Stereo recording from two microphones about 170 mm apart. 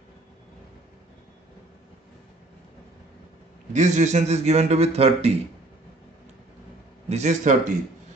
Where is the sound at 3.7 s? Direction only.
45° right (ahead or behind).